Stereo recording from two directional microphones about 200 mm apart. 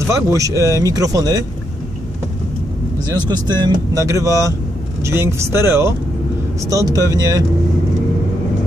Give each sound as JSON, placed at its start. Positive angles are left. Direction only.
{"t": 0.1, "sound": "speech", "side_deg": -15}
{"t": 3.3, "sound": "speech", "side_deg": -20}